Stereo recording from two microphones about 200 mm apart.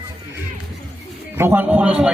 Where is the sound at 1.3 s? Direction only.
10° right (ahead or behind).